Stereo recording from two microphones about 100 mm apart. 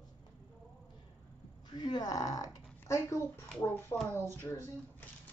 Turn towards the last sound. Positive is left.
turn(degrees=20)  # may be behind; listen again after turning